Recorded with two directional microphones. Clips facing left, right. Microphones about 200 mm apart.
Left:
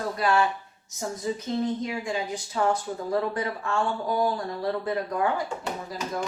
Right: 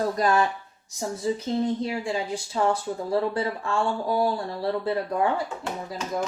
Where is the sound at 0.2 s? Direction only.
40° right (ahead or behind).